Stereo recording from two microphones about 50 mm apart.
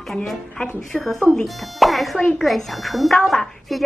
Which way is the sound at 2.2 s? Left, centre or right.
Centre.